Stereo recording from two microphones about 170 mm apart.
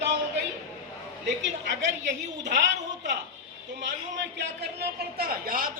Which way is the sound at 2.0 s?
90° right.